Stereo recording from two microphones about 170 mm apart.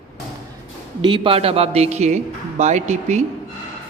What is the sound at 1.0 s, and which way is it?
Speech, 30° right (ahead or behind).